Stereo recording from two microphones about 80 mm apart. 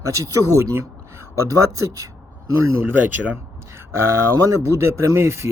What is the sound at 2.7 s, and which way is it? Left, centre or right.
Speech, right.